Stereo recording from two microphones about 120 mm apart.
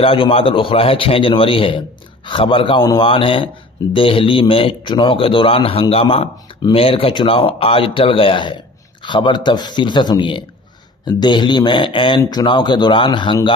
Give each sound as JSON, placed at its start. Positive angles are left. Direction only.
{"t": 0.0, "sound": "a man's voice", "side_deg": 50}